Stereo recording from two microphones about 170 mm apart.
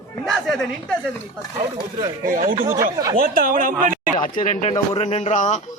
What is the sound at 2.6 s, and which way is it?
Speech, 20° right (ahead or behind).